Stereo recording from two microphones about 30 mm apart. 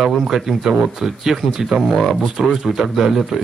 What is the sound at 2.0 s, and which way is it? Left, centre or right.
Speech, centre.